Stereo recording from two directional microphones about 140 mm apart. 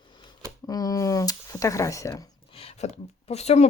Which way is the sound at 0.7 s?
25° left (ahead or behind).